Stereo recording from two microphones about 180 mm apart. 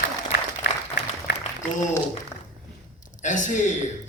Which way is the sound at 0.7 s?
65° left (ahead or behind).